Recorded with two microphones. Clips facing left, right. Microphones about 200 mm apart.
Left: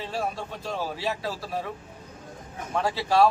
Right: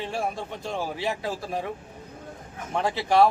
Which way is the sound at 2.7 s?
20° right (ahead or behind).